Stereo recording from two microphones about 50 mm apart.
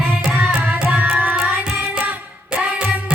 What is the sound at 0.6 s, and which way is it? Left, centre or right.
Tabla, right.